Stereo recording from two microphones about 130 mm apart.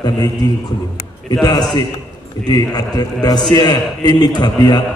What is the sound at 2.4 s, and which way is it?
A man's voice, 30° left (ahead or behind).